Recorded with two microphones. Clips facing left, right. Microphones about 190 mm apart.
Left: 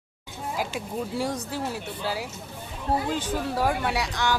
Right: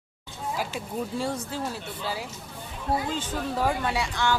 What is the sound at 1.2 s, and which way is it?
Speech, 15° left (ahead or behind).